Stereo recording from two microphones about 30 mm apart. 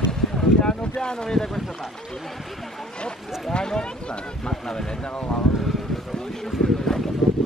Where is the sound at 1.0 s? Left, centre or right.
Left.